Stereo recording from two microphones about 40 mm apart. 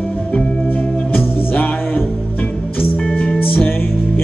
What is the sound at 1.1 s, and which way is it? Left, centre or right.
Music, left.